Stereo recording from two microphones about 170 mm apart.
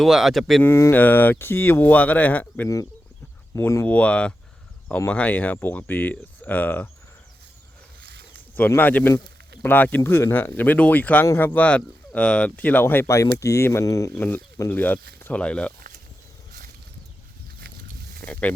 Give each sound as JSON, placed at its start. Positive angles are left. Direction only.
{"t": 0.0, "sound": "speech", "side_deg": 0}
{"t": 0.6, "sound": "speech", "side_deg": 15}
{"t": 8.0, "sound": "snake", "side_deg": -70}
{"t": 8.5, "sound": "speech", "side_deg": 10}
{"t": 18.2, "sound": "a sound", "side_deg": 10}